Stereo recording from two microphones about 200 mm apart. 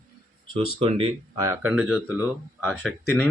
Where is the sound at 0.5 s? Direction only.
25° right (ahead or behind).